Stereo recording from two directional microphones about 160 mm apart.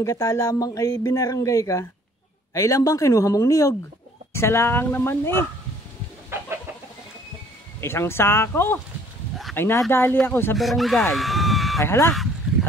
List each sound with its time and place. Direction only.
0.0 s speech: 20° left (ahead or behind)
7.8 s speech: 15° left (ahead or behind)
10.6 s speech: centre (ahead or behind)
11.8 s speech: 15° left (ahead or behind)